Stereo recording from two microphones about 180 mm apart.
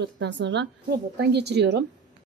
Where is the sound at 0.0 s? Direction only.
75° right (ahead or behind).